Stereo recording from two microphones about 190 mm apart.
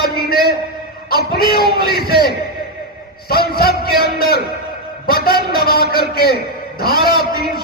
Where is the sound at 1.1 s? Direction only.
55° left (ahead or behind).